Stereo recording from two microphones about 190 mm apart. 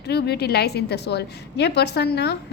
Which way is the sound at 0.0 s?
60° left (ahead or behind).